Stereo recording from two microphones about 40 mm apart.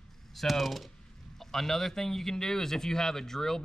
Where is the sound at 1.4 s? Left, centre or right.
Centre.